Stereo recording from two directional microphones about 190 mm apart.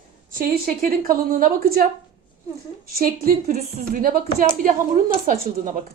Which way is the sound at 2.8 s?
50° right (ahead or behind).